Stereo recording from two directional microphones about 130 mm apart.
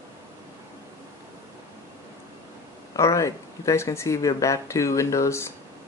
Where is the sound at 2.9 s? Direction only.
25° left (ahead or behind).